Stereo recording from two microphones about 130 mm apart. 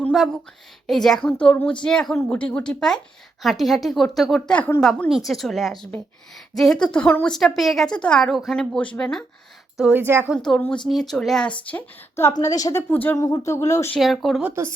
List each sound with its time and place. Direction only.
0.9 s a woman's voice: 5° left (ahead or behind)
4.9 s a woman's voice: centre (ahead or behind)
9.7 s speech: 5° right (ahead or behind)
10.0 s a woman's voice: 15° right (ahead or behind)
10.3 s a woman's voice: 5° left (ahead or behind)
11.6 s speech: 15° left (ahead or behind)
12.4 s speech: 30° left (ahead or behind)
12.9 s speech: 15° left (ahead or behind)
13.1 s speech: 25° left (ahead or behind)
13.9 s a woman's voice: centre (ahead or behind)
14.4 s speech: 20° right (ahead or behind)